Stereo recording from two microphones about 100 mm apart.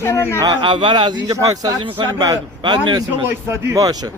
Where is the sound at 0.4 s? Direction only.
55° right (ahead or behind).